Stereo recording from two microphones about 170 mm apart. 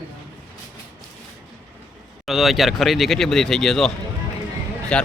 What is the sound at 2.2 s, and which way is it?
Speech, centre (ahead or behind).